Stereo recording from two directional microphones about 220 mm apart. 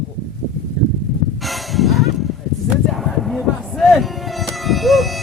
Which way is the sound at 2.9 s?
Centre (ahead or behind).